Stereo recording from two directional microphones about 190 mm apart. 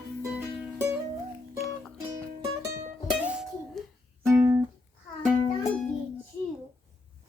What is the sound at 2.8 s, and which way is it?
Music, 5° right (ahead or behind).